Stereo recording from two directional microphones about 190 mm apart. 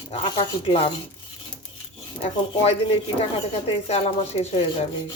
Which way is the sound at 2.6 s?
30° left (ahead or behind).